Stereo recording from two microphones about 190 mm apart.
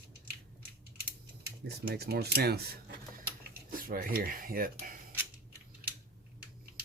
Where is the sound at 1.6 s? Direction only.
55° right (ahead or behind).